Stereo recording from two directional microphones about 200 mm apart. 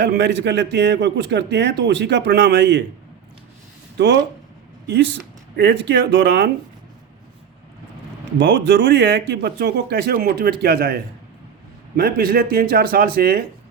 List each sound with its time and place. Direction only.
0.0 s speech: 55° right (ahead or behind)
3.9 s speech: 60° right (ahead or behind)
5.5 s speech: 60° right (ahead or behind)
8.4 s speech: 65° right (ahead or behind)